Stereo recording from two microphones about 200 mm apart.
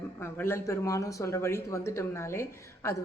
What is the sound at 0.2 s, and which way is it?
Speech, 10° left (ahead or behind).